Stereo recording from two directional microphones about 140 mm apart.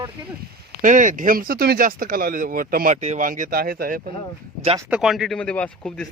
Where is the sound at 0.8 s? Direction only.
70° right (ahead or behind); by 3.0 s 85° right.